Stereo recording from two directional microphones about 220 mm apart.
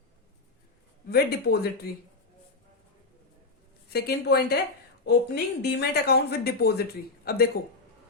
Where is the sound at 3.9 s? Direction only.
45° left (ahead or behind).